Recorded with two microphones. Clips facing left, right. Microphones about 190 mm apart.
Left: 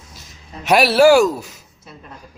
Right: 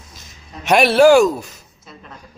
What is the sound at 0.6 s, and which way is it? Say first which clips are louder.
Speech: right 1 dB; 5° left (ahead or behind).